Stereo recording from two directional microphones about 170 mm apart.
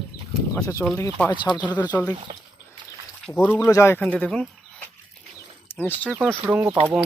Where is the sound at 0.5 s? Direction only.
20° left (ahead or behind).